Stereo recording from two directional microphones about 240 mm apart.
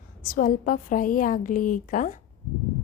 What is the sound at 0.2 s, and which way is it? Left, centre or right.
A woman's voice, left.